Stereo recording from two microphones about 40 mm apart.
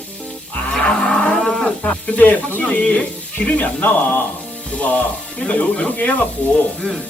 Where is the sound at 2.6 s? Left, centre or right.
Left.